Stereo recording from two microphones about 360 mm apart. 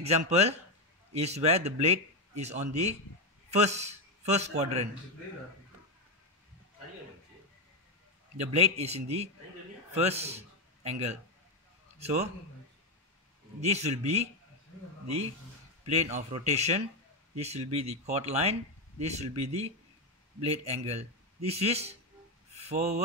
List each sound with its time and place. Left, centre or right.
0.0 s a man's voice: centre
8.5 s a man's voice: centre
13.6 s speech: centre
15.9 s speech: centre